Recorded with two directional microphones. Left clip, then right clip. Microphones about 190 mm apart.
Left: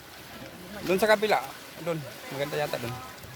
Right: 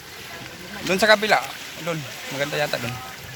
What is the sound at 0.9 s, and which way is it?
Speech, centre (ahead or behind).